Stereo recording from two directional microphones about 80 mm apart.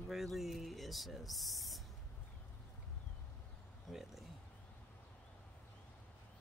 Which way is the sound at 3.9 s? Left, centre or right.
Centre.